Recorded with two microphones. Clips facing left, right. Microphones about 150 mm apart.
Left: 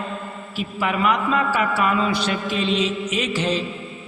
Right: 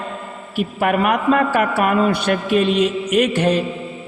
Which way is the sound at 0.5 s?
55° right (ahead or behind).